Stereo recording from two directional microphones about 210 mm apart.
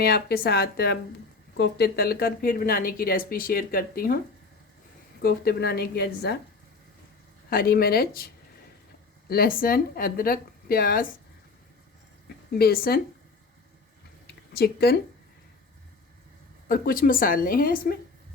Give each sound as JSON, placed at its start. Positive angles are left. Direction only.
{"t": 0.0, "sound": "a woman's voice", "side_deg": 45}
{"t": 5.2, "sound": "a woman's voice", "side_deg": 50}
{"t": 7.5, "sound": "a woman's voice", "side_deg": 45}
{"t": 9.3, "sound": "a woman's voice", "side_deg": 45}
{"t": 12.5, "sound": "a woman's voice", "side_deg": 45}
{"t": 14.5, "sound": "a woman's voice", "side_deg": 45}
{"t": 16.6, "sound": "a woman's voice", "side_deg": 45}